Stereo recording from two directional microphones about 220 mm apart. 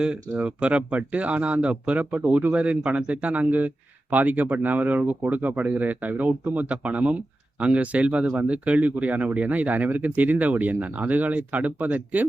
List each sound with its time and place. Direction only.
0.0 s speech: 5° right (ahead or behind)